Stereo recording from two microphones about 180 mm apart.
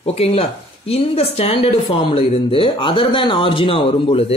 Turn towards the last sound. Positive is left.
turn(degrees=35)  # may be behind; listen again after turning